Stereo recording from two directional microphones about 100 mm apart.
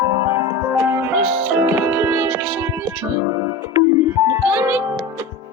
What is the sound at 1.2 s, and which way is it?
Music, 15° right (ahead or behind).